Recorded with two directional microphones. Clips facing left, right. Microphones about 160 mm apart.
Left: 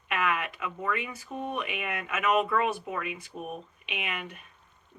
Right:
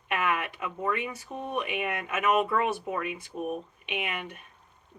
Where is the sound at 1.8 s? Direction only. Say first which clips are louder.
Right 2 dB; 30° right (ahead or behind).